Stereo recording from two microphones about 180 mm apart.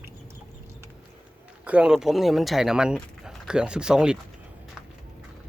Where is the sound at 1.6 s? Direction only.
5° right (ahead or behind).